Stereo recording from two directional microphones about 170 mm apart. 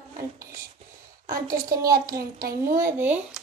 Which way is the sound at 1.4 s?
20° right (ahead or behind).